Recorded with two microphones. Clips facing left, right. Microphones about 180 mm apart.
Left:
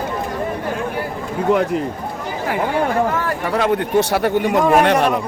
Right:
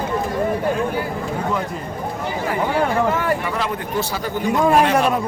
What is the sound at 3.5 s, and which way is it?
Speech, 70° left (ahead or behind).